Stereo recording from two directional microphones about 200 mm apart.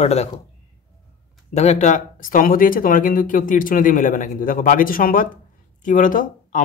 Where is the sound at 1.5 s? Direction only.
35° left (ahead or behind).